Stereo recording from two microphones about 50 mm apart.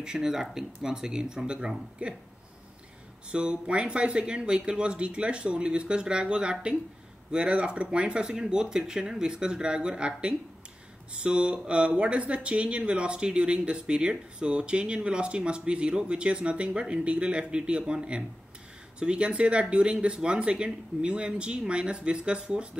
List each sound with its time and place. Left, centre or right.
0.0 s speech: centre
3.3 s speech: right